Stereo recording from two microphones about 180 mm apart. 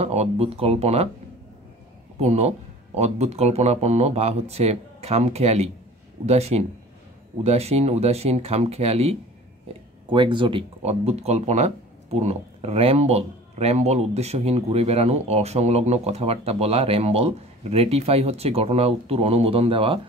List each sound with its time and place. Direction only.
0.0 s speech: 35° right (ahead or behind)
2.1 s speech: 35° right (ahead or behind)